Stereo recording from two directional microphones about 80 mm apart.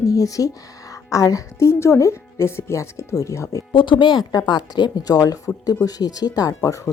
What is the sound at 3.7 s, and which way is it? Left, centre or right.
Speech, left.